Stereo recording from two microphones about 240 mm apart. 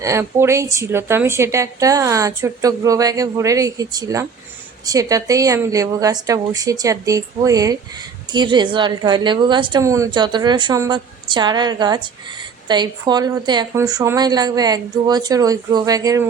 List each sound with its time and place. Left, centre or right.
0.0 s a woman's voice: centre